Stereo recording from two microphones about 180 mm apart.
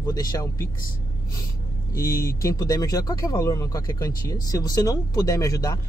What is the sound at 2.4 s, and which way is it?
Speech, 20° left (ahead or behind).